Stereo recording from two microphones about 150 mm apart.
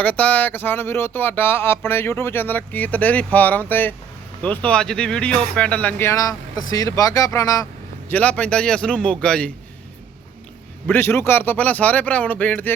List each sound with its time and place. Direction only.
0.0 s speech: 10° left (ahead or behind)
8.1 s speech: 10° left (ahead or behind)
10.8 s speech: 15° left (ahead or behind)